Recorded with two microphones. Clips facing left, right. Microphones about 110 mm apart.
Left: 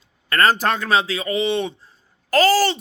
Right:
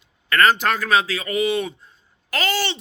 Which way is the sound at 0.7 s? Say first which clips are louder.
Even; 25° left (ahead or behind).